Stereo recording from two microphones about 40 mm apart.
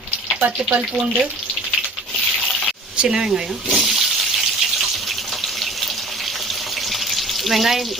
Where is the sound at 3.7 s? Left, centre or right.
Centre.